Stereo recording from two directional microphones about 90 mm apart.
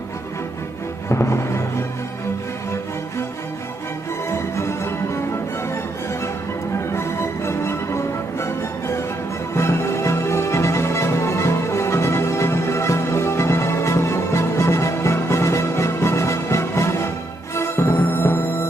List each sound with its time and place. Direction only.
1.0 s music: 30° left (ahead or behind)
4.3 s music: 30° left (ahead or behind)
6.9 s music: 30° left (ahead or behind)